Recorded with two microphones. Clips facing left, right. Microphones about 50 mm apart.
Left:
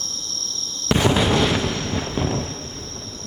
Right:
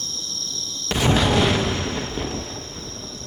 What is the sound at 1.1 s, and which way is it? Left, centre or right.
Artillery fire, centre.